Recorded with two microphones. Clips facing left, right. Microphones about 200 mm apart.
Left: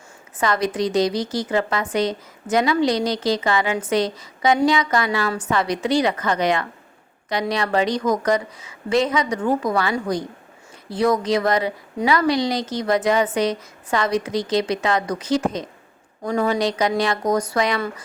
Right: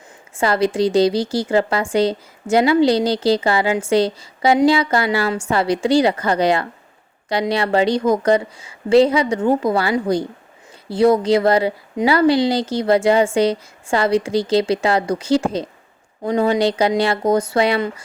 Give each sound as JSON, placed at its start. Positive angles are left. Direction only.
{"t": 0.3, "sound": "a woman's voice", "side_deg": -30}